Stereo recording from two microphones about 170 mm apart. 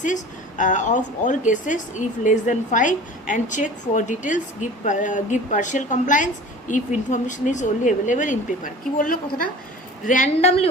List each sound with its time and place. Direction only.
0.0 s a woman's voice: 50° left (ahead or behind)